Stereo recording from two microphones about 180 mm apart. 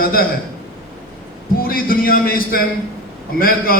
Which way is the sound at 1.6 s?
55° left (ahead or behind).